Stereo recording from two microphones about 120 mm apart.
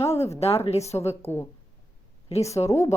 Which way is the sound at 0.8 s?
25° left (ahead or behind).